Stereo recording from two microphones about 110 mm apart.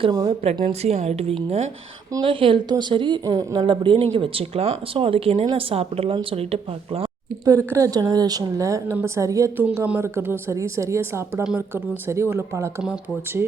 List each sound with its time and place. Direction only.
0.7 s a woman's voice: 75° right (ahead or behind)
2.2 s speech: 50° right (ahead or behind)
3.2 s speech: 35° right (ahead or behind)
3.7 s speech: 50° right (ahead or behind)
7.4 s speech: 30° right (ahead or behind)
9.6 s speech: 15° right (ahead or behind)